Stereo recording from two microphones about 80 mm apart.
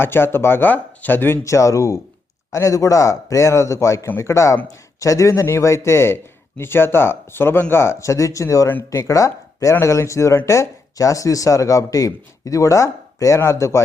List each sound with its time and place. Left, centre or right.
0.0 s speech: left